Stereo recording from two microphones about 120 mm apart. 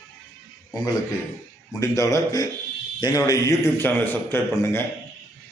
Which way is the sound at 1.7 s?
25° left (ahead or behind).